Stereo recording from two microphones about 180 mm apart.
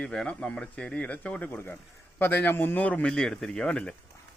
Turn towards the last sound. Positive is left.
turn(degrees=5)  # may be behind; listen again after turning